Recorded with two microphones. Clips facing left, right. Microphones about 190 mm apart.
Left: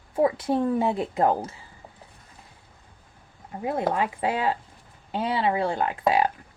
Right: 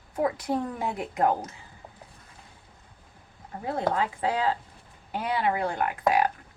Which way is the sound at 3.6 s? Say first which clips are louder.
Left 2 dB; 20° left (ahead or behind).